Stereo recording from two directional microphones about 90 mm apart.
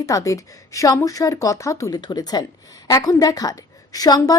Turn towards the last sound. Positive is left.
turn(degrees=45)  # may be behind; listen again after turning